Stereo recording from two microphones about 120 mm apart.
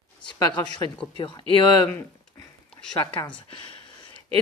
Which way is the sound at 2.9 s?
40° left (ahead or behind).